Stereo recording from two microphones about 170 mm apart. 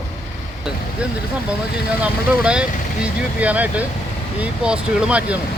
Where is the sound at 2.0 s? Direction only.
5° right (ahead or behind).